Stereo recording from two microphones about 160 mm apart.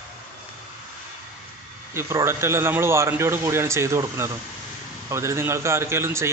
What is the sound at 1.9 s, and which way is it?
A man's voice, 15° right (ahead or behind).